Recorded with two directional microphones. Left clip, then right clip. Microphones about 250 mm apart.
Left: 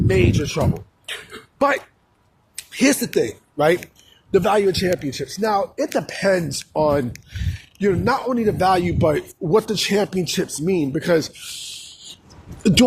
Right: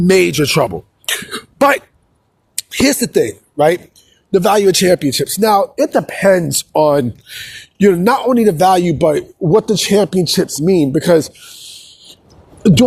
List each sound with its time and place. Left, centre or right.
0.1 s speech: right
2.6 s a man's voice: right
4.5 s speech: right
9.4 s speech: centre
10.3 s a sound: right